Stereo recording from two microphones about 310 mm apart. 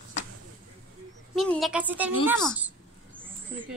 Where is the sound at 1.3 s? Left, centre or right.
Centre.